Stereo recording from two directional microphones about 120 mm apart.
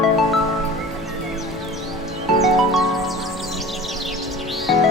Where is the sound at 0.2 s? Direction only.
Centre (ahead or behind).